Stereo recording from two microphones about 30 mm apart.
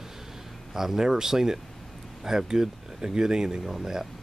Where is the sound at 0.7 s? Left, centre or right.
Centre.